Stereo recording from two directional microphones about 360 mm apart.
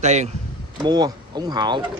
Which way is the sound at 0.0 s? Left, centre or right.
Centre.